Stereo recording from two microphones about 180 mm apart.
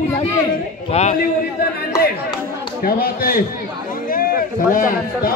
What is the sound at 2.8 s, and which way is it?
Speech, 55° left (ahead or behind).